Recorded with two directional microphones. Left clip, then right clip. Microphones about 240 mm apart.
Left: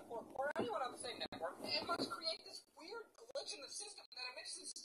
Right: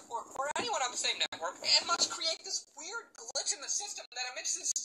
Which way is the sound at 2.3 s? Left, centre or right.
Right.